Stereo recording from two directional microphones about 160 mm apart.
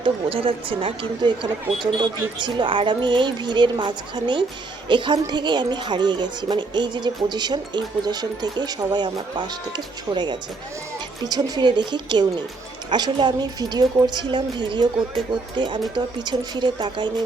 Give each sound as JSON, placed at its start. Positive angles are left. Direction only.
{"t": 0.0, "sound": "a woman's voice", "side_deg": -35}